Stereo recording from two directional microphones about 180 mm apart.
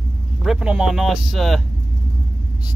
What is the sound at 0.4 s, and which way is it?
Speech, 5° right (ahead or behind).